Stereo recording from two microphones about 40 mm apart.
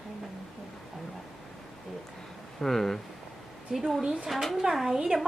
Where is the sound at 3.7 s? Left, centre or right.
Centre.